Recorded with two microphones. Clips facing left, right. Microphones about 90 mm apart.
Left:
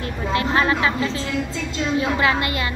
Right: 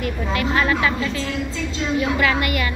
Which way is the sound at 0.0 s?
30° left (ahead or behind).